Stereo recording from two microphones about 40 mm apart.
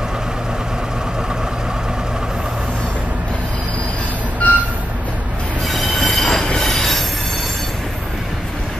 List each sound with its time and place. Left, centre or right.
4.4 s vehicle: left
5.7 s train wheels squealing: centre